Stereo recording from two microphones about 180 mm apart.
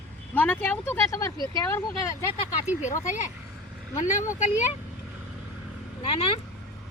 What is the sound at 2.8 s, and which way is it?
Speech, 45° left (ahead or behind).